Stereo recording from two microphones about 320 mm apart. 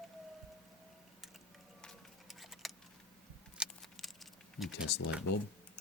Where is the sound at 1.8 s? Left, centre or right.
Centre.